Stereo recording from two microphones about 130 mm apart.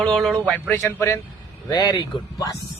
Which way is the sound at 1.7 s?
30° left (ahead or behind).